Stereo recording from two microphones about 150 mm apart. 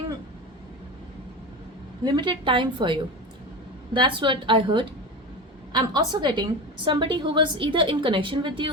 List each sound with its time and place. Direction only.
2.0 s a woman's voice: 30° right (ahead or behind)